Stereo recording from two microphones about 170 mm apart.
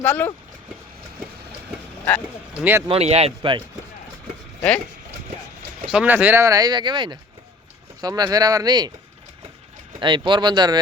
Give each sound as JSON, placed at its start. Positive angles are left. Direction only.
{"t": 0.0, "sound": "speech", "side_deg": 10}
{"t": 2.0, "sound": "a sound", "side_deg": 10}
{"t": 2.6, "sound": "speech", "side_deg": -10}
{"t": 2.8, "sound": "speech", "side_deg": -35}
{"t": 5.9, "sound": "speech", "side_deg": -5}
{"t": 10.0, "sound": "speech", "side_deg": -30}